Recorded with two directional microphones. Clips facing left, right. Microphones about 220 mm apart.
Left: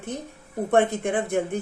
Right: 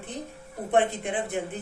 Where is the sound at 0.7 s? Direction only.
45° left (ahead or behind).